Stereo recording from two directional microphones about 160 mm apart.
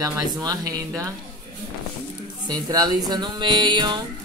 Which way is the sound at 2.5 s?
25° right (ahead or behind).